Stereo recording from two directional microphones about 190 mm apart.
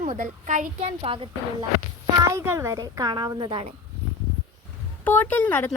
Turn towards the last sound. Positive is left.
turn(degrees=10)  # may be behind; listen again after turning